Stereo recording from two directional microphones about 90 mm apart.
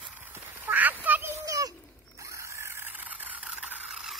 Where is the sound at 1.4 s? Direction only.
40° right (ahead or behind); by 3.4 s 20° right (ahead or behind).